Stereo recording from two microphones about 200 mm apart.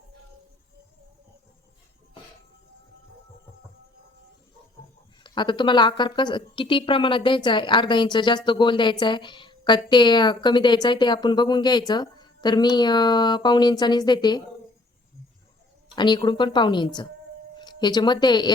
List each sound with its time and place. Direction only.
5.2 s a woman's voice: 25° left (ahead or behind)
16.0 s a woman's voice: 20° left (ahead or behind)